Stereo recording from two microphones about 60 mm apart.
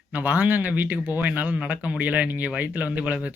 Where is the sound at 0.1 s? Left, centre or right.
Right.